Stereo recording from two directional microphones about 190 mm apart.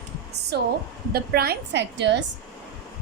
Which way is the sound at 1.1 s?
55° right (ahead or behind).